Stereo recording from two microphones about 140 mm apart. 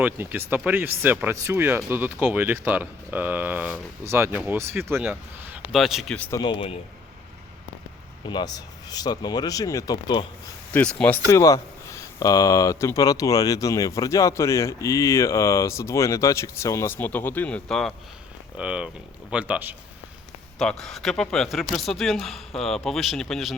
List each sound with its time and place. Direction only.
0.0 s speech: 15° right (ahead or behind)
5.7 s speech: centre (ahead or behind)
6.3 s a man's voice: 30° left (ahead or behind)
8.2 s speech: 35° left (ahead or behind)
10.7 s speech: 10° left (ahead or behind)
11.3 s speech: 25° left (ahead or behind); by 17.9 s 5° left (ahead or behind)
18.5 s speech: 5° right (ahead or behind)
20.6 s speech: 5° left (ahead or behind)